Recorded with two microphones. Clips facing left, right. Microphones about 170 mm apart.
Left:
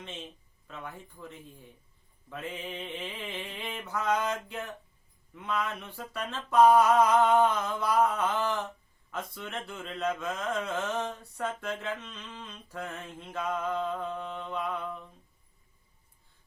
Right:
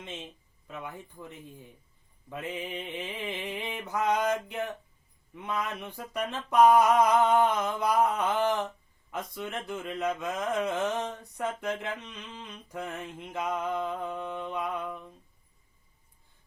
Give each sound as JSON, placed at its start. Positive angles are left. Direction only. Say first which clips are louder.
{"t": 0.7, "sound": "mantra", "louder": "right 2 dB", "side_deg": -15}